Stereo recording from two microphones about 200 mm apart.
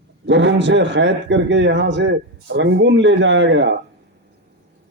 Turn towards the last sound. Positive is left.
turn(degrees=-65)  # may be behind; listen again after turning